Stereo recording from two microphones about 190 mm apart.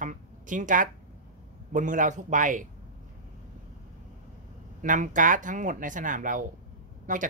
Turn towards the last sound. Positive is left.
turn(degrees=-45)  # may be behind; listen again after turning